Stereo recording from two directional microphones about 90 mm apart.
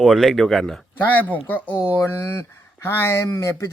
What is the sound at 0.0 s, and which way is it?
Speech, 5° right (ahead or behind).